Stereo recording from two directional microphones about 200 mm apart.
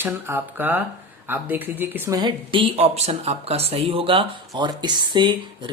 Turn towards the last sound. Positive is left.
turn(degrees=-25)  # may be behind; listen again after turning